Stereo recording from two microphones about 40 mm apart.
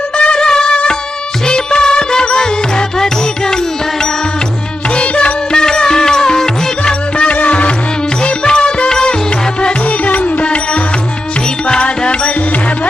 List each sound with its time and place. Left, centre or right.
0.2 s music: left
4.9 s music: left
7.3 s music: left
8.2 s music: left
11.8 s music: left